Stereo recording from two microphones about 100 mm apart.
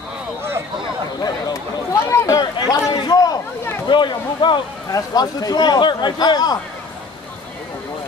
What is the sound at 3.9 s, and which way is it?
Speech, 55° left (ahead or behind).